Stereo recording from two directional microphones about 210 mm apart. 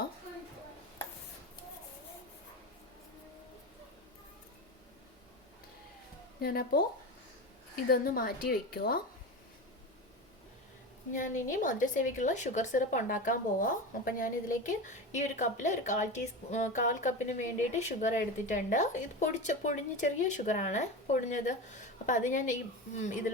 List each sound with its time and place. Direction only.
6.4 s a woman's voice: 45° left (ahead or behind)
7.9 s a woman's voice: 45° left (ahead or behind)
11.1 s a woman's voice: 35° left (ahead or behind)